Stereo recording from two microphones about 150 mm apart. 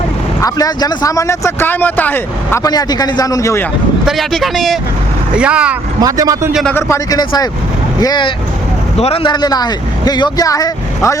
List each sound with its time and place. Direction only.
0.4 s a man's voice: 25° left (ahead or behind)
2.6 s speech: 25° left (ahead or behind)
4.0 s speech: centre (ahead or behind)
6.0 s a man's voice: 25° right (ahead or behind)
6.5 s speech: centre (ahead or behind)
6.7 s speech: 20° left (ahead or behind)
9.0 s speech: 40° left (ahead or behind); by 11.2 s 20° left (ahead or behind)